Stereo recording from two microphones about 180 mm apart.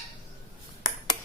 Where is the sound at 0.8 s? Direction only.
20° left (ahead or behind).